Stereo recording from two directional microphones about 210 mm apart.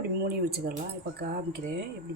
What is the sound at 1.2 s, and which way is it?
Speech, 50° right (ahead or behind).